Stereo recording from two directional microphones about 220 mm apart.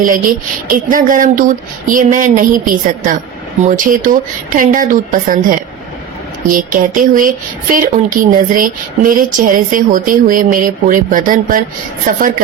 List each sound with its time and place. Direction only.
0.0 s speech: 40° right (ahead or behind)